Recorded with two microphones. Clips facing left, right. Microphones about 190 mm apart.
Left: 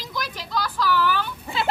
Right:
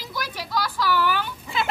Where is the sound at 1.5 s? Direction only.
30° left (ahead or behind).